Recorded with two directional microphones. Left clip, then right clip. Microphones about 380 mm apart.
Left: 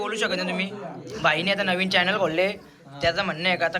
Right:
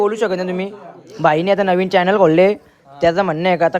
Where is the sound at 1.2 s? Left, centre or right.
Right.